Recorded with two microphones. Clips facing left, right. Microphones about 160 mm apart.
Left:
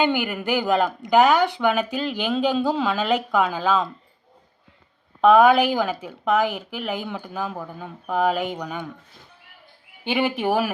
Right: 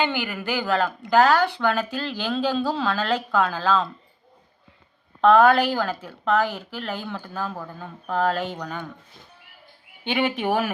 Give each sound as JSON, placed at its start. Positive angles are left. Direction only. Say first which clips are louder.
{"t": 0.0, "sound": "speech", "louder": "left 3 dB", "side_deg": 15}
{"t": 5.2, "sound": "speech", "louder": "left 1 dB", "side_deg": 15}
{"t": 10.0, "sound": "speech", "louder": "left 1 dB", "side_deg": 5}